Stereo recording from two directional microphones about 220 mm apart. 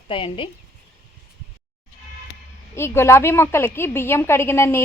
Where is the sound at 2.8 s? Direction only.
10° left (ahead or behind).